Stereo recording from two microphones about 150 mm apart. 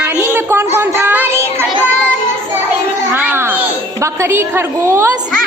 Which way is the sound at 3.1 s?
15° right (ahead or behind).